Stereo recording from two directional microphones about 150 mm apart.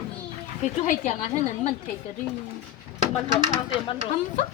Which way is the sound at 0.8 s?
50° left (ahead or behind).